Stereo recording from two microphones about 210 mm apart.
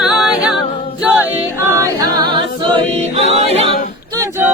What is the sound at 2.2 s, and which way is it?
A capella, 20° right (ahead or behind).